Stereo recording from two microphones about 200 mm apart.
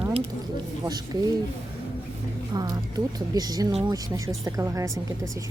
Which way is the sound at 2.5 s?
20° right (ahead or behind).